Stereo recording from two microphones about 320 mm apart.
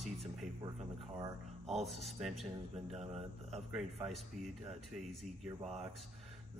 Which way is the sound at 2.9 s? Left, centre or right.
Centre.